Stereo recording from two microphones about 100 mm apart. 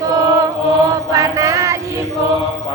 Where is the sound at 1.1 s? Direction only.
30° right (ahead or behind).